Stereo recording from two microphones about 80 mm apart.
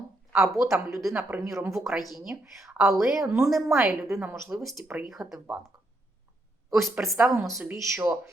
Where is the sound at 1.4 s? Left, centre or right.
Right.